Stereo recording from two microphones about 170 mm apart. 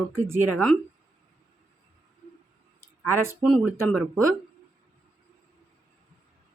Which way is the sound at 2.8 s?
15° right (ahead or behind).